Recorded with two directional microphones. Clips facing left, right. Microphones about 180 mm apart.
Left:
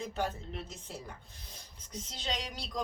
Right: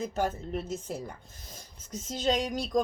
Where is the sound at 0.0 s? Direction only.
45° right (ahead or behind).